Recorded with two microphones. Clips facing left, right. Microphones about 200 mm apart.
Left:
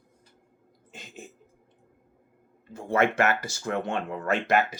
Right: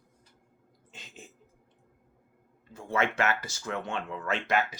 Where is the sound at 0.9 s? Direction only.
45° left (ahead or behind).